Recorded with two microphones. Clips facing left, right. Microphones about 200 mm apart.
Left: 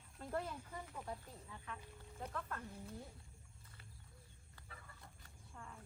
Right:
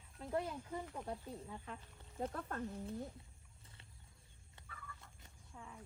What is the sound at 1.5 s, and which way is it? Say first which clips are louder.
Speech: right 2 dB; 30° right (ahead or behind).